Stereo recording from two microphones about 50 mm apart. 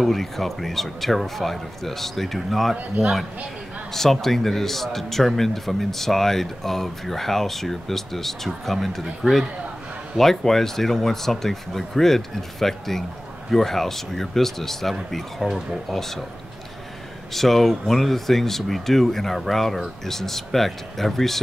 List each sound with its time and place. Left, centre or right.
0.0 s a man's voice: centre
17.3 s a man's voice: centre